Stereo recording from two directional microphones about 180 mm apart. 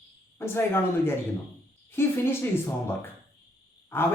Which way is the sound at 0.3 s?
15° left (ahead or behind).